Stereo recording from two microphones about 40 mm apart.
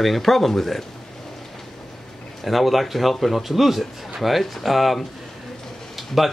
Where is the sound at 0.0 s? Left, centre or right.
Centre.